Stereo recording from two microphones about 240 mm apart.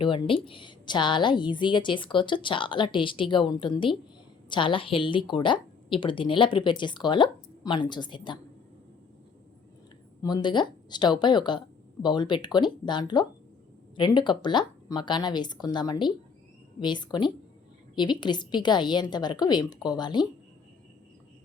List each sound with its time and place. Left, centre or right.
0.0 s a woman's voice: left
10.2 s a woman's voice: centre